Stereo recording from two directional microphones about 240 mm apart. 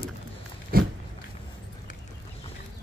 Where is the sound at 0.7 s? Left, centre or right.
Right.